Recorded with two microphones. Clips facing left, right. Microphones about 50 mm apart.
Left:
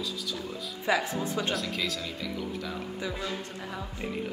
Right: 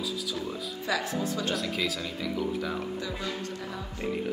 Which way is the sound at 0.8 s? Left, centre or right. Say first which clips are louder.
Left 2 dB; left.